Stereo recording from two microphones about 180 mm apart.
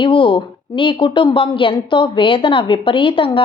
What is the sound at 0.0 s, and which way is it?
A woman's voice, 25° left (ahead or behind).